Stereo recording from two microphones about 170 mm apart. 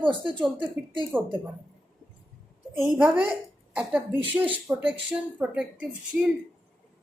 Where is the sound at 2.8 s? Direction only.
5° right (ahead or behind).